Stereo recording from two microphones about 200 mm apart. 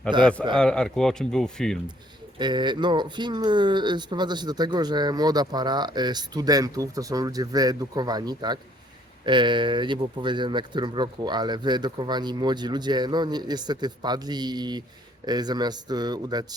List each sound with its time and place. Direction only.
0.1 s speech: 25° right (ahead or behind)
0.5 s speech: 5° left (ahead or behind)
2.4 s speech: 20° right (ahead or behind)